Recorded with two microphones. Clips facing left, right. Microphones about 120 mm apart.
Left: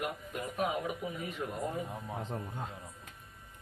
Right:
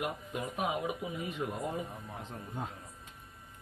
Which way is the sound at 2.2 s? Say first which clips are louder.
Left 8 dB; 35° left (ahead or behind).